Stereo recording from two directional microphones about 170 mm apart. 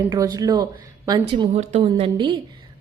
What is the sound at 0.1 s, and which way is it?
A woman's voice, 20° right (ahead or behind).